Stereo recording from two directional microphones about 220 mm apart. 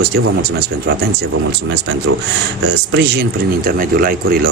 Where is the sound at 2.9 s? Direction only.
50° right (ahead or behind).